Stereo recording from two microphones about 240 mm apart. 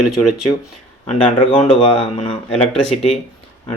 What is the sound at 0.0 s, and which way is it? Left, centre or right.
Speech, centre.